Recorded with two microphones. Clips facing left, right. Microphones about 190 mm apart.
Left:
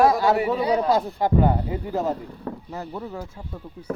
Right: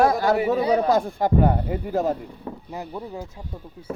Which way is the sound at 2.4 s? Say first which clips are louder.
Left 1 dB; 15° right (ahead or behind).